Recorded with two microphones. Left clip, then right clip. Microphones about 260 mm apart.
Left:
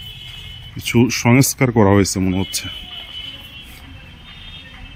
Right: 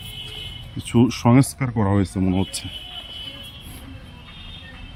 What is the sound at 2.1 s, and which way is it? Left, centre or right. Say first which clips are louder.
Speech: left 3 dB; centre.